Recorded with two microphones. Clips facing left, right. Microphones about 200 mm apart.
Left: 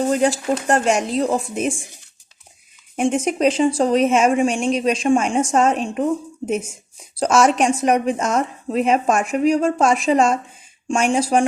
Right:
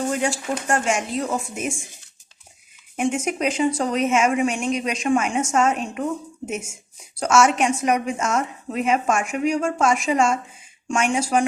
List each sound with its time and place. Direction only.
0.1 s a woman's voice: 35° left (ahead or behind)
2.9 s a woman's voice: 35° left (ahead or behind)